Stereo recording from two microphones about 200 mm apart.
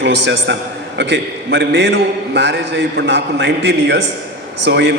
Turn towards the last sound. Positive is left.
turn(degrees=-60)  # may be behind; listen again after turning